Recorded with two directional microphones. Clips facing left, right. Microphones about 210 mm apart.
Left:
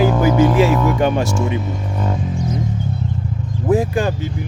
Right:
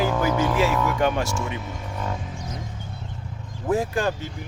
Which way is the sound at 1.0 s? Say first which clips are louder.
Left 6 dB; 20° left (ahead or behind).